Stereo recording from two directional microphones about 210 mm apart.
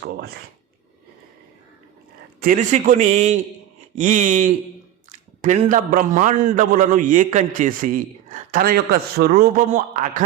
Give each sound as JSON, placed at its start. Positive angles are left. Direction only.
{"t": 2.4, "sound": "a man's voice", "side_deg": -40}